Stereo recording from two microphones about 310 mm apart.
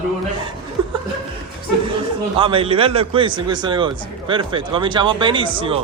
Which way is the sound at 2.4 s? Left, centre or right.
Centre.